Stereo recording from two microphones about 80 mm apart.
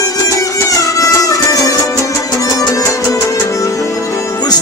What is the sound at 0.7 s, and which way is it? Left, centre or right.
Music, left.